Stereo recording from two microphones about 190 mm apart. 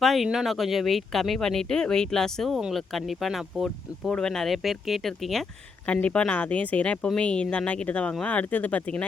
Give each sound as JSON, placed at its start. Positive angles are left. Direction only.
{"t": 0.0, "sound": "speech", "side_deg": 0}